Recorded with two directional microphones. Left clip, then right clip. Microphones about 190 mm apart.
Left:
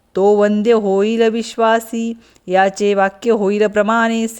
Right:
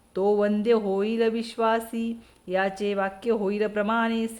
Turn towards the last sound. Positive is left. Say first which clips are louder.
# left 10 dB
turn(degrees=45)  # may be behind; listen again after turning